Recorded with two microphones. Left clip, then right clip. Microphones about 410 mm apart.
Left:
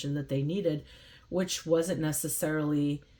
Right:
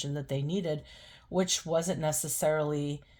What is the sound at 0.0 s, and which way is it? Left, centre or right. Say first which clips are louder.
Speech: left 2 dB; right.